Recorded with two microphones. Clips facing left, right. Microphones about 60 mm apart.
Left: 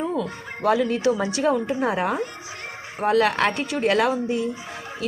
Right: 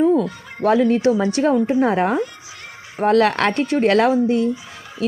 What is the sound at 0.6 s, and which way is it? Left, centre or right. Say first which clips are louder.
A woman's voice: right 5 dB; right.